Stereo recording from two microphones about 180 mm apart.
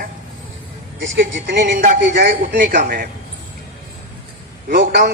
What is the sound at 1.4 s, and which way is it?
A man's voice, 55° right (ahead or behind).